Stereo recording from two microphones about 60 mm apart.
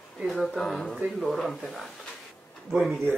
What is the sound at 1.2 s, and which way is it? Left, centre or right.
Speech, centre.